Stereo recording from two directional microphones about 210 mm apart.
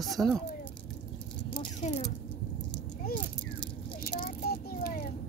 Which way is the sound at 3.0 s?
45° left (ahead or behind).